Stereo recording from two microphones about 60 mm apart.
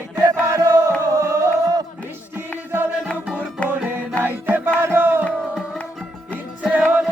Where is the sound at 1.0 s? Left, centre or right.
Right.